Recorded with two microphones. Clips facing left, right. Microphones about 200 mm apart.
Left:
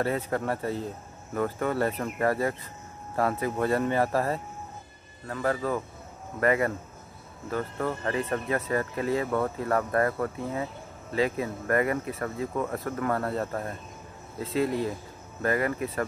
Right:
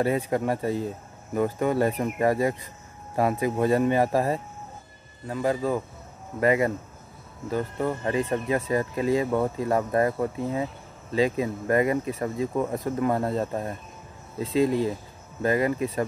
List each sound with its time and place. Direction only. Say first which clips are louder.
0.0 s speech: right 4 dB; 15° right (ahead or behind)